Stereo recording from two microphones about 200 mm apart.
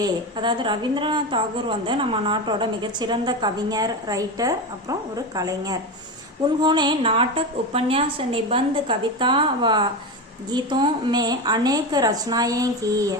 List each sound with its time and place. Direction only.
0.0 s a woman's voice: 25° right (ahead or behind)